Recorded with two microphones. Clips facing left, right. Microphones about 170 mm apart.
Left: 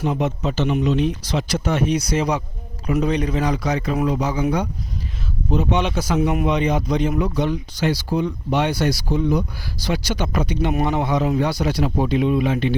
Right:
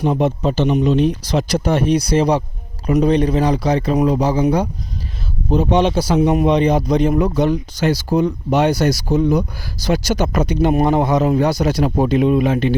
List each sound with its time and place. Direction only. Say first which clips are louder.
0.0 s speech: right 5 dB; 35° right (ahead or behind)